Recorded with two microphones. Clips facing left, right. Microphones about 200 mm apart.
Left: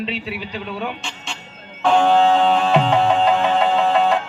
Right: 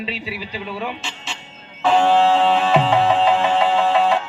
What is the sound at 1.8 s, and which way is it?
Music, centre (ahead or behind).